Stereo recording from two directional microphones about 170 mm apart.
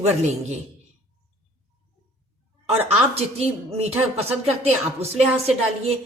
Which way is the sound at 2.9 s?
35° right (ahead or behind).